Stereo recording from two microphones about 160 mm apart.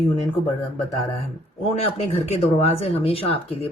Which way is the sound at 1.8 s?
40° left (ahead or behind).